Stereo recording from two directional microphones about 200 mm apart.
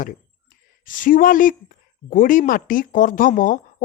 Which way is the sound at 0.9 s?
40° left (ahead or behind).